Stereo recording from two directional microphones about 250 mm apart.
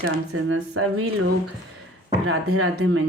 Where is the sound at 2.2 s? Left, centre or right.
Right.